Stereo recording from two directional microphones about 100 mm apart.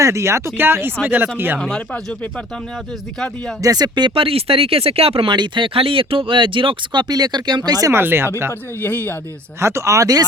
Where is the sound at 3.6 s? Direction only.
40° right (ahead or behind); by 5.3 s 70° right (ahead or behind).